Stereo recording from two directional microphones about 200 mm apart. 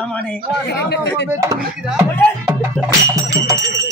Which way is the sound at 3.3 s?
20° right (ahead or behind).